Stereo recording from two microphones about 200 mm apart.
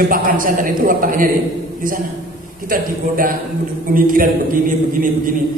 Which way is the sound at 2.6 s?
45° right (ahead or behind).